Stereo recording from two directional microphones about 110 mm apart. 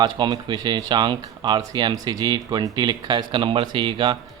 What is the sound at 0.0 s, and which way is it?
Speech, 40° right (ahead or behind).